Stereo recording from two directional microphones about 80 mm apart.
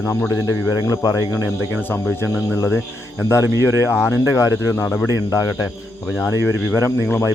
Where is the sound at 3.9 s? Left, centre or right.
Left.